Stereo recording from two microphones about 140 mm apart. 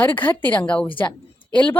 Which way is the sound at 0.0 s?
15° left (ahead or behind).